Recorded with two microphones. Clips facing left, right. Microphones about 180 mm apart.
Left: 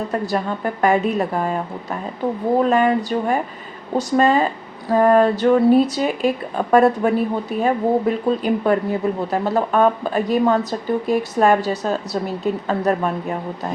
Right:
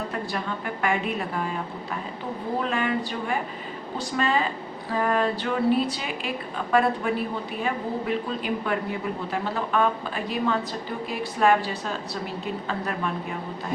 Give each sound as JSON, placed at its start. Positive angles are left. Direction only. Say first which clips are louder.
{"t": 0.1, "sound": "speech", "louder": "left 8 dB", "side_deg": 40}